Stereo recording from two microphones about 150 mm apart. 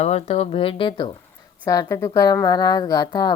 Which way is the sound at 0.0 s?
45° left (ahead or behind).